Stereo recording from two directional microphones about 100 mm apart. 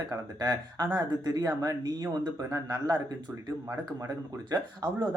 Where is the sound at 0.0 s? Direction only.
40° right (ahead or behind).